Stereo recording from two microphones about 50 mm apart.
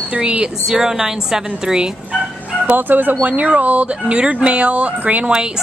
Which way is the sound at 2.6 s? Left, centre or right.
Right.